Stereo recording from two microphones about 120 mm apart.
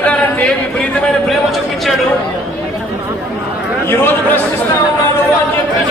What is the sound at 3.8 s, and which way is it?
Speech, 15° left (ahead or behind).